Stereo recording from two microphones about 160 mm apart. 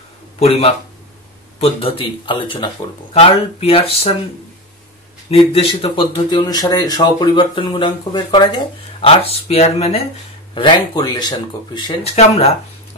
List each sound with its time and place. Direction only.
0.4 s speech: 40° left (ahead or behind)
5.3 s speech: 35° left (ahead or behind)
10.5 s speech: 30° left (ahead or behind)
12.0 s speech: 40° left (ahead or behind)